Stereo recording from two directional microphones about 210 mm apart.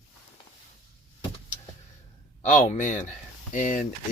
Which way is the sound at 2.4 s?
35° left (ahead or behind).